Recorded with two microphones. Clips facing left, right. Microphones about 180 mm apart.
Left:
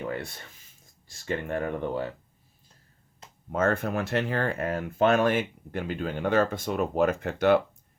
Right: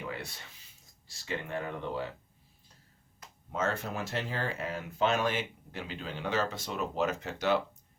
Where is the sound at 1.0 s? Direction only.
50° left (ahead or behind).